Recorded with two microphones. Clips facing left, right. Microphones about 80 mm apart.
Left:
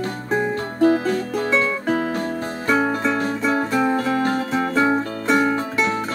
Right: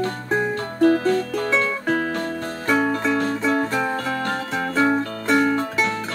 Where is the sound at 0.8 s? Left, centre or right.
Centre.